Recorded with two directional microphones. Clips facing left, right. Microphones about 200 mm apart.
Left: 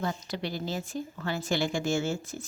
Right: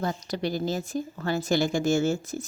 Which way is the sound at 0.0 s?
40° right (ahead or behind).